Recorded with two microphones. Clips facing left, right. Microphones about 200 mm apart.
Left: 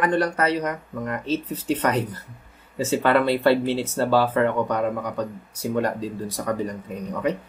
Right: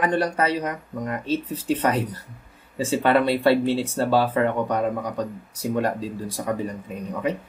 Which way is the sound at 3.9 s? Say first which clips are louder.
Even; 25° right (ahead or behind).